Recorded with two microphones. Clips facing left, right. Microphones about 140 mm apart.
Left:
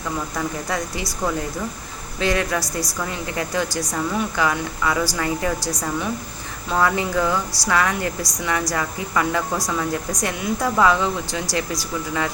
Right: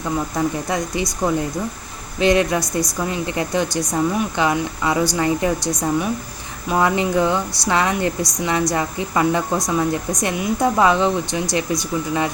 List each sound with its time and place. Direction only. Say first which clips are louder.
0.3 s speech: right 4 dB; 20° right (ahead or behind)